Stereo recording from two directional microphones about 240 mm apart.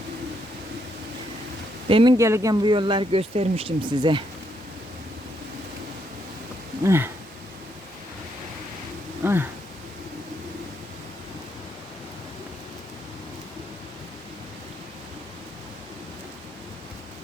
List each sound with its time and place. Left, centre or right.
1.9 s speech: centre
6.8 s a sound: centre
9.2 s speech: centre